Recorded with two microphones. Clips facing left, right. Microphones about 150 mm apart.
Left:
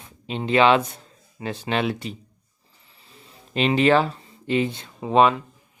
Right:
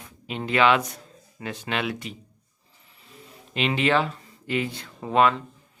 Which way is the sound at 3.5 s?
35° left (ahead or behind).